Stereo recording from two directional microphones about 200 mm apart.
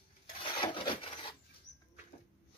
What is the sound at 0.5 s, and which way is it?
Rub, 25° left (ahead or behind).